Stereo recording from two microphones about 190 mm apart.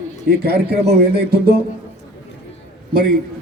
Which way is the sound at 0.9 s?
55° right (ahead or behind).